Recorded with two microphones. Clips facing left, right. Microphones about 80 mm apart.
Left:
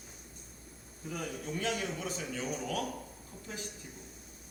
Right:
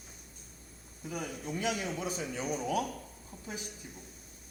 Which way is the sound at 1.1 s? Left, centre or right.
Centre.